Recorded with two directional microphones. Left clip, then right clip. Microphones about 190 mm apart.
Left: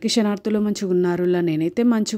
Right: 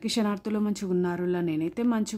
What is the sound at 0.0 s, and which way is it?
Speech, 25° left (ahead or behind).